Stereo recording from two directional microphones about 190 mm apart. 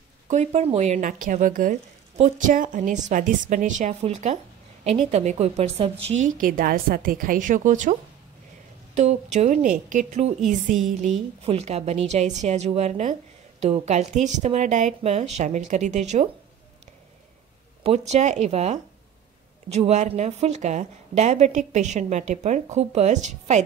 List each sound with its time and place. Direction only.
0.3 s a woman's voice: 35° right (ahead or behind)
8.9 s a woman's voice: 35° right (ahead or behind)
17.8 s a woman's voice: 35° right (ahead or behind)